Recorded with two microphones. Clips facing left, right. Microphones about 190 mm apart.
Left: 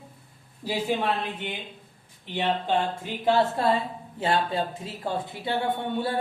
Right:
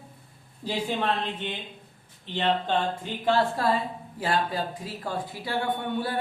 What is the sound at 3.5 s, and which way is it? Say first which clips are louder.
Speech: left 1 dB; 25° left (ahead or behind).